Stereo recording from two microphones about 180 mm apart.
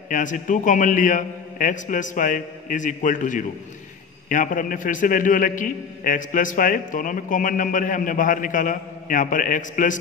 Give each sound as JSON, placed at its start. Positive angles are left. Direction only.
{"t": 0.1, "sound": "a man's voice", "side_deg": 45}